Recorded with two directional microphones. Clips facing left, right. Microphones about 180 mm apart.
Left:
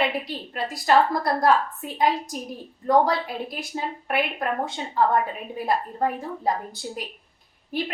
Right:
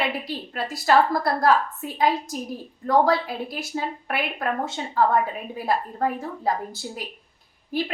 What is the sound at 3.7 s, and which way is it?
A woman's voice, 5° left (ahead or behind).